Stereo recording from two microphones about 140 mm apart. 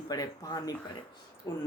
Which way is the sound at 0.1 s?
25° left (ahead or behind).